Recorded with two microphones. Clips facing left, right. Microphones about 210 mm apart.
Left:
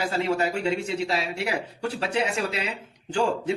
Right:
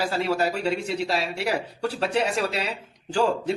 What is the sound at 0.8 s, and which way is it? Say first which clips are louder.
Speech: even; 5° left (ahead or behind).